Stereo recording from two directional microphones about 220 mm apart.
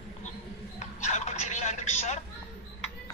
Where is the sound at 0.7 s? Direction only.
30° left (ahead or behind).